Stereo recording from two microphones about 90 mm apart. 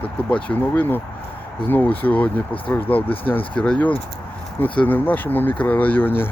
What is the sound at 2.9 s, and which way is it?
Speech, 90° left.